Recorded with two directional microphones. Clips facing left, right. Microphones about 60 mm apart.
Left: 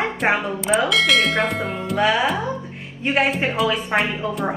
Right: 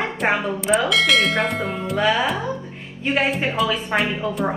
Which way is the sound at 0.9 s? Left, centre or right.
Centre.